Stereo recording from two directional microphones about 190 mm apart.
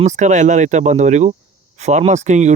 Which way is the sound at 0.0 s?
40° right (ahead or behind).